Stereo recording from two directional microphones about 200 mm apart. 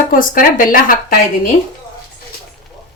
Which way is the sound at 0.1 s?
45° left (ahead or behind).